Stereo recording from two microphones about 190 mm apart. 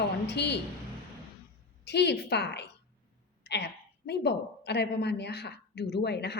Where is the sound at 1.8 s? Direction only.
65° left (ahead or behind).